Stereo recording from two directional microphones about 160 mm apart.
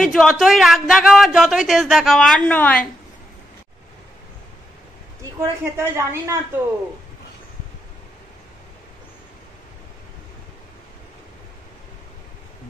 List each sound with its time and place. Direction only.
0.0 s speech: centre (ahead or behind)
5.4 s a woman's voice: 15° right (ahead or behind)